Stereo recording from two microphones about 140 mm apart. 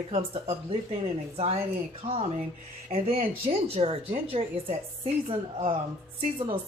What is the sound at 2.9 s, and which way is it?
Speech, 45° right (ahead or behind).